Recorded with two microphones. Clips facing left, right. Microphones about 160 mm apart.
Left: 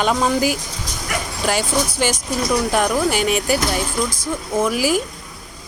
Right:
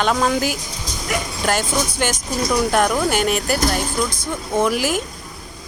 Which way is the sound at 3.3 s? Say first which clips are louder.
Left 1 dB; 40° right (ahead or behind).